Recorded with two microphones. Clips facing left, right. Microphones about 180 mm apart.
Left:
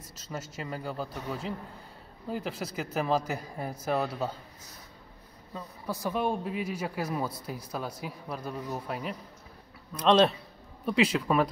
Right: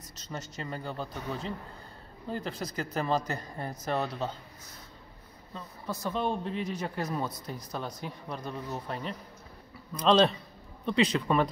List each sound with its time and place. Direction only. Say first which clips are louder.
0.1 s a man's voice: left 1 dB; 5° left (ahead or behind)
5.5 s a man's voice: left 2 dB; 10° left (ahead or behind)